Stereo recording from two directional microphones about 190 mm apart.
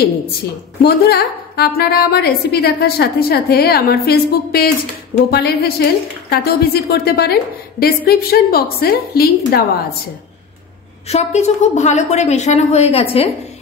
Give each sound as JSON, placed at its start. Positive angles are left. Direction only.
{"t": 0.8, "sound": "a woman's voice", "side_deg": 55}
{"t": 11.1, "sound": "a woman's voice", "side_deg": 35}